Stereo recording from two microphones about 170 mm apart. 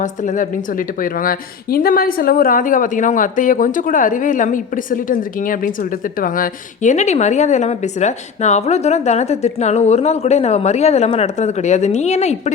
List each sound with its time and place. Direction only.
0.0 s a woman's voice: 45° left (ahead or behind)